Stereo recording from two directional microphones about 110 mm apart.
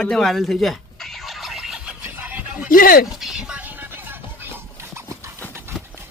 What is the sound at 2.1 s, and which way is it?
Music, 15° right (ahead or behind).